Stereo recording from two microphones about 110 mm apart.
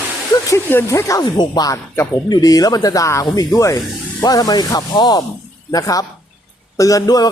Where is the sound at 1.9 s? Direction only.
20° left (ahead or behind).